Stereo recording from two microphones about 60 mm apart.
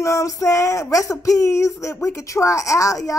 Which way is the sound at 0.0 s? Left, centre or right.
Left.